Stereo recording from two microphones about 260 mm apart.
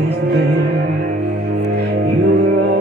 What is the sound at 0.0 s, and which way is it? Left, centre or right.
Music, right.